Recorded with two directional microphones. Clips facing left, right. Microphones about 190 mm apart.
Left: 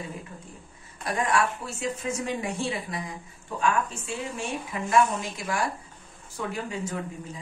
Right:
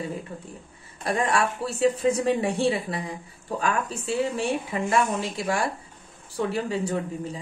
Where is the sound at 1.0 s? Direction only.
30° right (ahead or behind).